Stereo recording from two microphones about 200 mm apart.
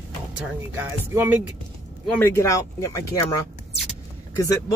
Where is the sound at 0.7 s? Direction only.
10° right (ahead or behind).